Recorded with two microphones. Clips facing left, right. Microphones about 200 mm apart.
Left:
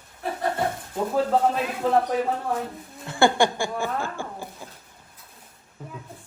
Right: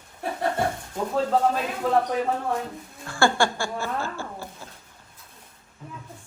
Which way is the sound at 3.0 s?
20° left (ahead or behind).